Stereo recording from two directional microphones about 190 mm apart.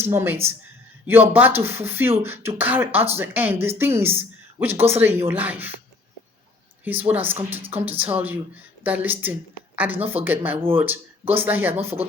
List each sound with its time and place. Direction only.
0.0 s speech: 10° right (ahead or behind)
7.1 s a woman's voice: 10° right (ahead or behind)